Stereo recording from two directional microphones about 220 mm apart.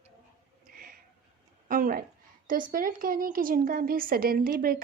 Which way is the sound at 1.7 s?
40° right (ahead or behind).